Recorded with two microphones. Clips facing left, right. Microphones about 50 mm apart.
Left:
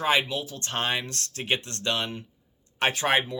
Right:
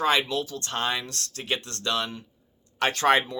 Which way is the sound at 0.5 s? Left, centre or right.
Left.